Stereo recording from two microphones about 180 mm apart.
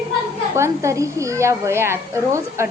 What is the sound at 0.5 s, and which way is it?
Speech, 15° right (ahead or behind).